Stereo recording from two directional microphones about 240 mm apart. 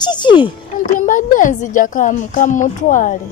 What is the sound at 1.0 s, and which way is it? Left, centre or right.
A woman's voice, left.